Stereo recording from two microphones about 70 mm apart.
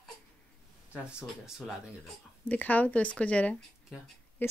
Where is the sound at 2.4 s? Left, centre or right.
Left.